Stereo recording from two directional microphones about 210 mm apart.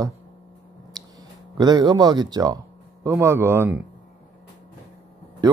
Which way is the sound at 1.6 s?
20° right (ahead or behind).